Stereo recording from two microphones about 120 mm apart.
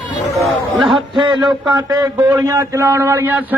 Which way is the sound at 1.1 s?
40° right (ahead or behind).